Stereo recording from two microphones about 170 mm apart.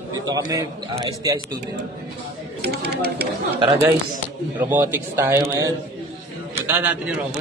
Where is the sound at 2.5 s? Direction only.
70° right (ahead or behind).